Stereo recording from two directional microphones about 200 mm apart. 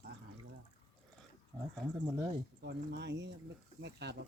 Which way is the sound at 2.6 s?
55° right (ahead or behind).